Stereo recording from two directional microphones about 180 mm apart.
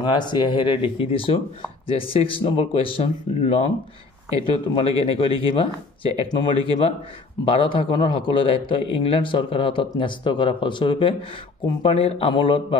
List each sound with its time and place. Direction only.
0.0 s a man's voice: 25° left (ahead or behind)